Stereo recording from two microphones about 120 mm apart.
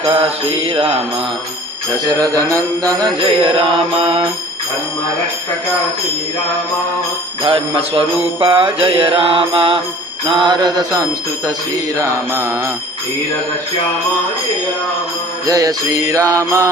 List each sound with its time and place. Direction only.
0.0 s mantra: 45° right (ahead or behind)
2.0 s speech: 30° right (ahead or behind)
3.2 s mantra: 45° right (ahead or behind)
7.4 s mantra: 45° right (ahead or behind)
10.2 s a sound: 40° right (ahead or behind)
11.4 s speech: 30° right (ahead or behind)
15.4 s speech: 30° right (ahead or behind)